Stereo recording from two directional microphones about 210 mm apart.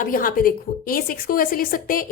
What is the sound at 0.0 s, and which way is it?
A woman's voice, 40° left (ahead or behind).